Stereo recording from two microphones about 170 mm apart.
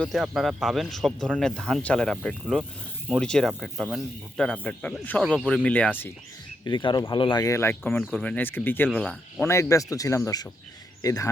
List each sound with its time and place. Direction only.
0.0 s speech: centre (ahead or behind)
6.7 s speech: 25° left (ahead or behind)